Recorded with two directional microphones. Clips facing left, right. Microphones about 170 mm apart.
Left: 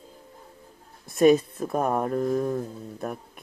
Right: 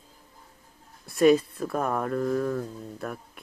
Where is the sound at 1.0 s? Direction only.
50° left (ahead or behind).